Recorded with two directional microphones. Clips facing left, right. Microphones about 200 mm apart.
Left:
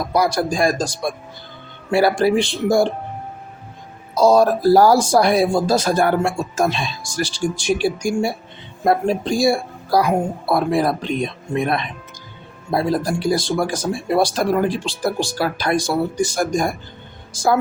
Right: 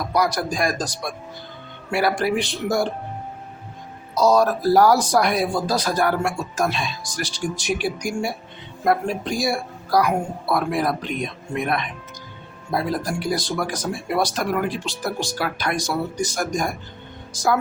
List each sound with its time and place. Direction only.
0.1 s speech: 30° left (ahead or behind)
4.1 s speech: 30° left (ahead or behind)